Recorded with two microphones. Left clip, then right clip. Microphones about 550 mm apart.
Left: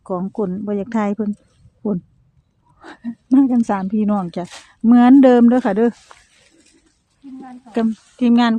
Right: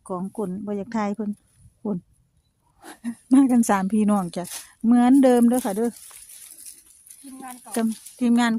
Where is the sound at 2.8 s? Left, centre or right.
Right.